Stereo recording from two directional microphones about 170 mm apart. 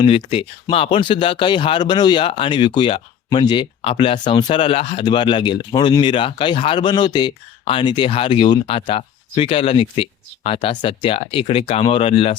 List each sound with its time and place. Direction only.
0.0 s speech: 30° left (ahead or behind)